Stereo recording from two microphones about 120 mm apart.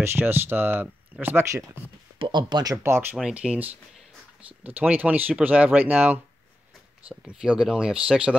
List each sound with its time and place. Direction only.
0.0 s speech: 20° right (ahead or behind)
2.1 s speech: 40° right (ahead or behind); by 3.2 s 20° right (ahead or behind)
3.2 s speech: 10° right (ahead or behind)